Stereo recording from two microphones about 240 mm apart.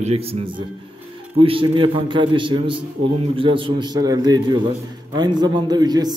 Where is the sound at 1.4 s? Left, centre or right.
Right.